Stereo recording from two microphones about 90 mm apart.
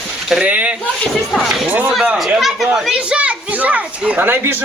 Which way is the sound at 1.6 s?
20° right (ahead or behind).